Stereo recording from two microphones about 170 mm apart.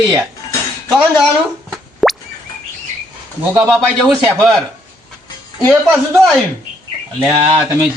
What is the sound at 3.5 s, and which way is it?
Speech, centre (ahead or behind).